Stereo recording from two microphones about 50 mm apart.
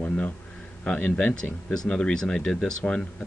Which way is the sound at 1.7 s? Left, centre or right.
Left.